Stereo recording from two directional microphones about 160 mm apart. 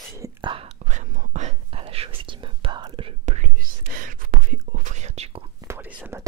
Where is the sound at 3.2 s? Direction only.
50° right (ahead or behind).